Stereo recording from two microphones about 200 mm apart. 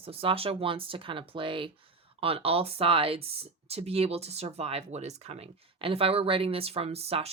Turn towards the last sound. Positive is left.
turn(degrees=-30)  # may be behind; listen again after turning